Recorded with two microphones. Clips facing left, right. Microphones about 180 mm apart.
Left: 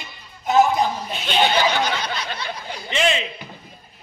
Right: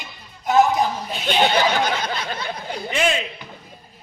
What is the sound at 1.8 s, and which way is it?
Snicker, 45° right (ahead or behind).